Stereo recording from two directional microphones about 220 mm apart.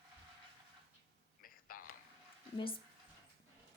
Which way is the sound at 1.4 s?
40° left (ahead or behind).